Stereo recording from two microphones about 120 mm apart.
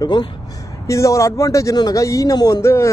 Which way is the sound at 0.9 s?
25° left (ahead or behind).